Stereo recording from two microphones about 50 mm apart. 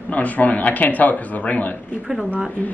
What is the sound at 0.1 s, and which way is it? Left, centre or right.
Speech, left.